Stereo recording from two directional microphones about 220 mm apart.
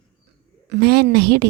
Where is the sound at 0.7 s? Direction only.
50° right (ahead or behind).